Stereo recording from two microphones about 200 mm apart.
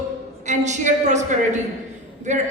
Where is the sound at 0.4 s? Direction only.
35° right (ahead or behind).